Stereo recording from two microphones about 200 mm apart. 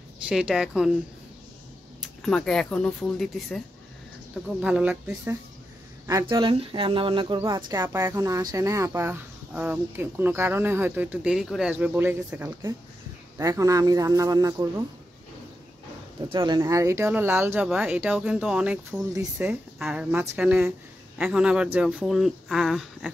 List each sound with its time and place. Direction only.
0.3 s speech: 5° right (ahead or behind)
2.0 s speech: centre (ahead or behind); by 14.7 s 15° right (ahead or behind)
16.3 s speech: 20° right (ahead or behind); by 23.1 s centre (ahead or behind)